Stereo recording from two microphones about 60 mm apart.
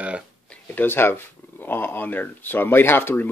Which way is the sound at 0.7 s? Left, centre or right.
Left.